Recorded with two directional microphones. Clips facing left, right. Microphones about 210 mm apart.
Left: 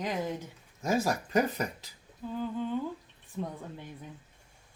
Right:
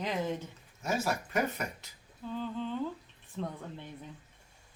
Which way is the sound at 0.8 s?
35° left (ahead or behind).